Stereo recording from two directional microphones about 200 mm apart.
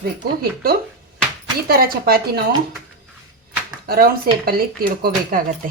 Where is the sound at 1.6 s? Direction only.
50° right (ahead or behind).